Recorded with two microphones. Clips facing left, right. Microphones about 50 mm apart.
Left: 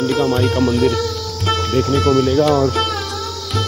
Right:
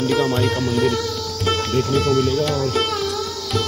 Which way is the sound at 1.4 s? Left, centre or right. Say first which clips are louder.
Left 3 dB; centre.